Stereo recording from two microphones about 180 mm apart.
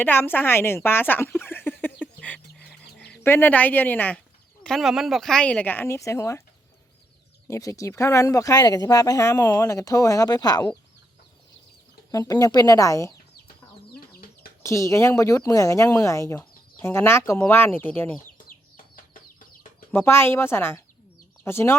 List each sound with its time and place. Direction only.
0.0 s a woman's voice: 10° left (ahead or behind)
2.6 s bird: 5° left (ahead or behind)
4.6 s speech: centre (ahead or behind); by 6.4 s 15° left (ahead or behind)
7.4 s speech: 15° left (ahead or behind)
12.1 s speech: 20° left (ahead or behind)
13.9 s chicken: 55° left (ahead or behind)
14.6 s speech: 15° left (ahead or behind)
19.9 s speech: 15° left (ahead or behind)